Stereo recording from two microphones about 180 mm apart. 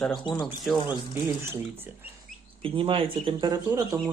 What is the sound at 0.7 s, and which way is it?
Speech, 10° right (ahead or behind).